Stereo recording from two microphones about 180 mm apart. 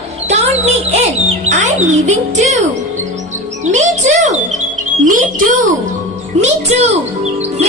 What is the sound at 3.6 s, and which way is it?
A child's voice, 40° right (ahead or behind).